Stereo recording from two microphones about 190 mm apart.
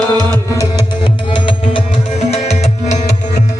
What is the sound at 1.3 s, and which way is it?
Music, 25° left (ahead or behind).